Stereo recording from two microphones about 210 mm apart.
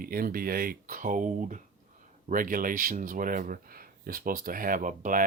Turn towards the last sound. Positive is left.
turn(degrees=-40)  # may be behind; listen again after turning